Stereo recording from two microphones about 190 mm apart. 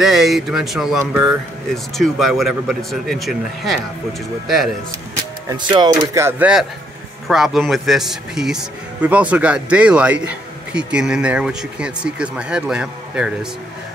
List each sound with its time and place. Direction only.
0.0 s a man's voice: centre (ahead or behind)
5.5 s a man's voice: 25° right (ahead or behind); by 13.5 s 5° right (ahead or behind)